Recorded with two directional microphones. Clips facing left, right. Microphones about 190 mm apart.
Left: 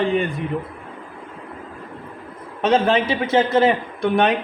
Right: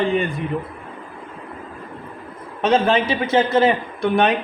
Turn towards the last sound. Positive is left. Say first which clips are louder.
# even
turn(degrees=55)  # may be behind; listen again after turning